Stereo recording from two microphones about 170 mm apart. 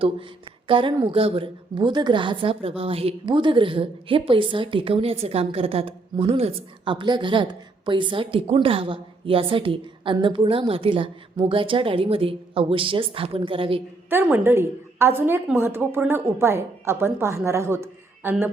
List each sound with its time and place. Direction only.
0.7 s a woman's voice: 30° right (ahead or behind)
14.1 s a woman's voice: 10° right (ahead or behind)